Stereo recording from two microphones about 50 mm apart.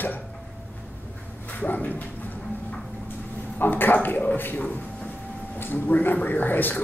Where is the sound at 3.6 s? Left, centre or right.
Left.